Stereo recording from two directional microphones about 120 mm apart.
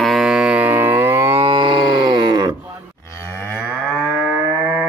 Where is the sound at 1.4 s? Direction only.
40° right (ahead or behind).